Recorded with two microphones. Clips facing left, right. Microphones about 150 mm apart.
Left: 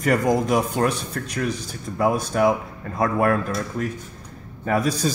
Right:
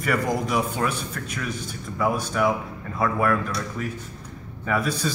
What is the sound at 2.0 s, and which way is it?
A man's voice, 40° left (ahead or behind).